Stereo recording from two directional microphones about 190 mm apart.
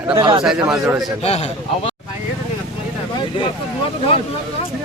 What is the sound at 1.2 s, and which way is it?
Speech, 35° left (ahead or behind).